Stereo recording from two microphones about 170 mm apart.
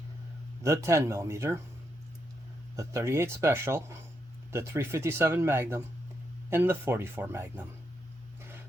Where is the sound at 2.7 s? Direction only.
15° right (ahead or behind).